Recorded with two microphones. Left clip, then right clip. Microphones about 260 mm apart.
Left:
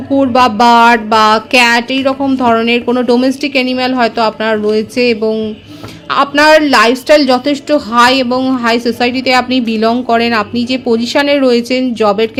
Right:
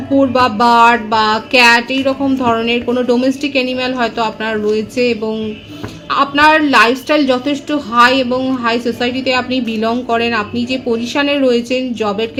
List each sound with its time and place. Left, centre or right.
0.2 s a woman's voice: left